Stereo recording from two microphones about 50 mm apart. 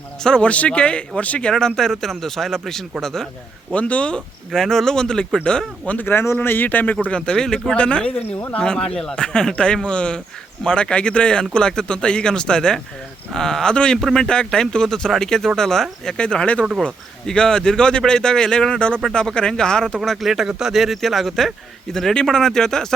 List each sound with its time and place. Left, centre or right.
0.2 s a man's voice: centre
0.4 s a man's voice: left; by 3.2 s centre
3.7 s speech: left
4.5 s a man's voice: centre
6.1 s speech: left
7.2 s a man's voice: centre
14.0 s a man's voice: centre
20.1 s speech: centre
22.1 s a man's voice: centre